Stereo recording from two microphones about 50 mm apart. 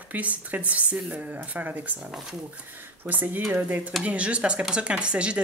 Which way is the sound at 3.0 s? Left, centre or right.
Right.